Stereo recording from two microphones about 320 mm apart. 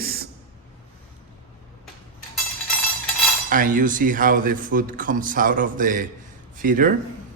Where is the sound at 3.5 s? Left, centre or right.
Right.